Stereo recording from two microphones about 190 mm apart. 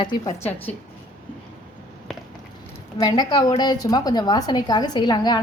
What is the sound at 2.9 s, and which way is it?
A woman's voice, 20° left (ahead or behind).